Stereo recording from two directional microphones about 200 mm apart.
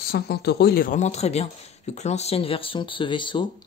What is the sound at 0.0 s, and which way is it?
Speech, 50° left (ahead or behind).